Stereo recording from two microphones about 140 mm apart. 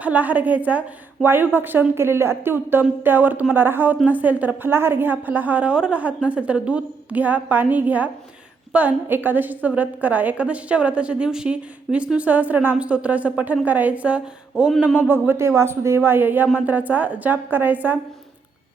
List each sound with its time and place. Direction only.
0.0 s a woman's voice: 10° right (ahead or behind)
14.5 s a sound: 5° left (ahead or behind)
14.9 s a woman's voice: 10° right (ahead or behind)